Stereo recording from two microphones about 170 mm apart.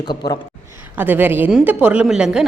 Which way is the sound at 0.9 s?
10° right (ahead or behind).